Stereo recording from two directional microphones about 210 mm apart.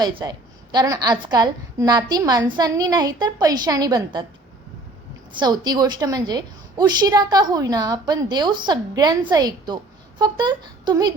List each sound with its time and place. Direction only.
0.0 s a woman's voice: 20° right (ahead or behind)
5.4 s a woman's voice: 20° right (ahead or behind)